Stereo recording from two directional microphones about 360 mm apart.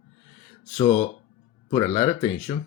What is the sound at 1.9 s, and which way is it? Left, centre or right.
Speech, centre.